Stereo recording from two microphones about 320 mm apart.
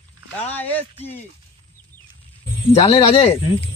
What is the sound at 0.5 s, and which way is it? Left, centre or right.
Speech, centre.